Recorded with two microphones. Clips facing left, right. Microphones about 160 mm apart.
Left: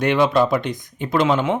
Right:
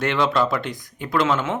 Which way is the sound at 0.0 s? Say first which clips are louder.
Left 4 dB; 15° left (ahead or behind).